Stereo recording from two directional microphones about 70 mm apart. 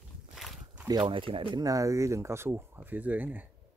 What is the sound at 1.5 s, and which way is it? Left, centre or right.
Speech, right.